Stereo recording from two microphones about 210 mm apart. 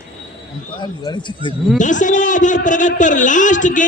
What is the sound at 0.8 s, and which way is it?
Speech, 20° left (ahead or behind).